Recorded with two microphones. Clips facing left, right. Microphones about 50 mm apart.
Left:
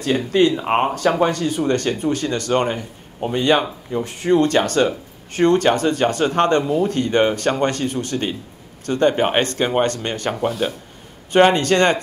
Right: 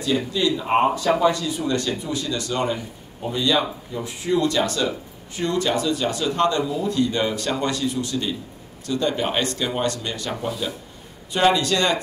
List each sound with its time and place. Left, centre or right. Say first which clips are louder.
0.0 s speech: left 5 dB; left